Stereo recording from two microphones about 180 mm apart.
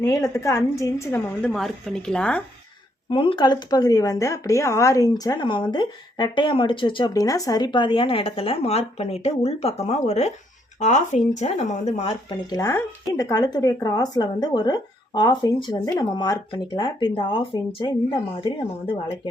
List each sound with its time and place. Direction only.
0.0 s a woman's voice: 20° left (ahead or behind)
1.4 s speech: 5° left (ahead or behind)
3.1 s a woman's voice: 30° left (ahead or behind)
12.5 s a woman's voice: 15° left (ahead or behind)